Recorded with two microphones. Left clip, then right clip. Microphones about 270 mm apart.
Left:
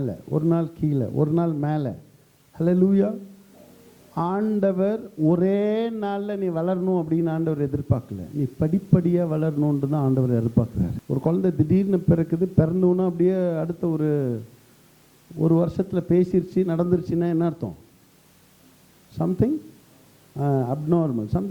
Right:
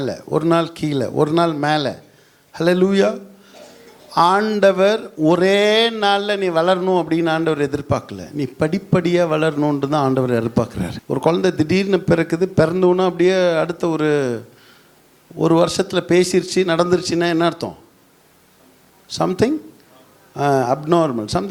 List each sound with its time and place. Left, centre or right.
0.1 s a man's voice: centre
4.2 s a man's voice: centre
15.4 s a man's voice: centre
19.1 s a man's voice: centre